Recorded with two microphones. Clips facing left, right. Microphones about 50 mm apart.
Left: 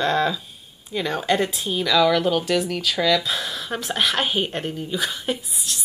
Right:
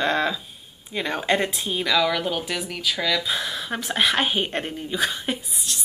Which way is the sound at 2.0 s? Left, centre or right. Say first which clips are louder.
Left 5 dB; centre.